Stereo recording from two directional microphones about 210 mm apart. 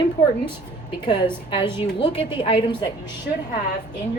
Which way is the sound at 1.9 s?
55° left (ahead or behind).